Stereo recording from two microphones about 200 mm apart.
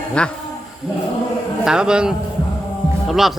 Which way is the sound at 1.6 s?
5° right (ahead or behind).